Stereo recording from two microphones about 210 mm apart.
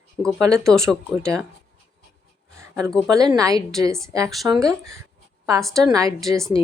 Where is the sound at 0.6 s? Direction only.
Centre (ahead or behind).